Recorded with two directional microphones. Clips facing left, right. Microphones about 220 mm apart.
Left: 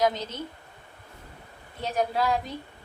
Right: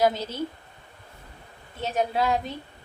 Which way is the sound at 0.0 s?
10° right (ahead or behind).